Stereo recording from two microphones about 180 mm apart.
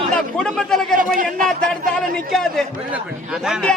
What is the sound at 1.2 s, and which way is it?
Speech, 50° right (ahead or behind).